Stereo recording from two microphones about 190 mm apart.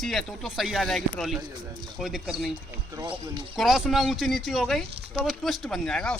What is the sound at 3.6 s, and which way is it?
Speech, centre (ahead or behind).